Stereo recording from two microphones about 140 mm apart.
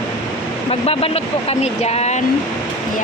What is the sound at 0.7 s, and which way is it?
Speech, 45° left (ahead or behind).